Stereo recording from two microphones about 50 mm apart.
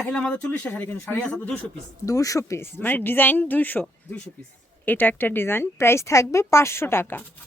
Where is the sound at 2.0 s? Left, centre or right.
Left.